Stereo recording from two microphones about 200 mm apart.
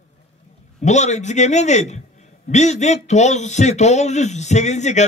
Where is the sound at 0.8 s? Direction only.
35° left (ahead or behind).